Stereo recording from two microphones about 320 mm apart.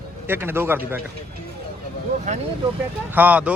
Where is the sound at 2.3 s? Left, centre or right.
Right.